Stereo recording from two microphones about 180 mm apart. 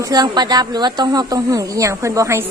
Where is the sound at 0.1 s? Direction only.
20° right (ahead or behind).